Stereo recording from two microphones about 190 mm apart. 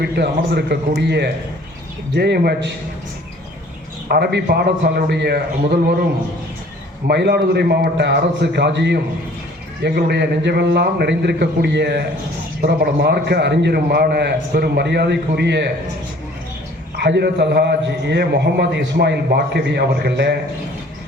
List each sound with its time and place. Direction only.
0.0 s a man's voice: 60° right (ahead or behind)
4.1 s a man's voice: 60° right (ahead or behind)
7.1 s a man's voice: 60° right (ahead or behind)
17.0 s a man's voice: 60° right (ahead or behind)